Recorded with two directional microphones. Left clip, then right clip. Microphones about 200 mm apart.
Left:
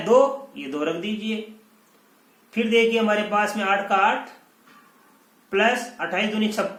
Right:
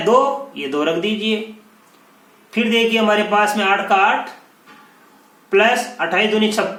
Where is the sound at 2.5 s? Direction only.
20° left (ahead or behind).